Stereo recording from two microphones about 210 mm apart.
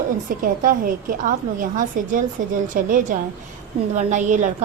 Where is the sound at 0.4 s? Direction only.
40° right (ahead or behind).